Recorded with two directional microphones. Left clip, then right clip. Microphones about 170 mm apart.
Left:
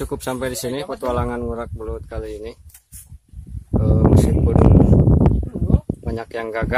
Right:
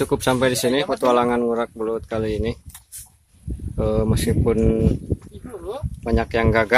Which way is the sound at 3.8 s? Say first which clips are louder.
Left 3 dB; centre (ahead or behind).